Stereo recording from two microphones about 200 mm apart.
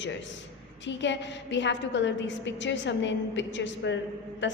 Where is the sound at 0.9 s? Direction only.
65° left (ahead or behind).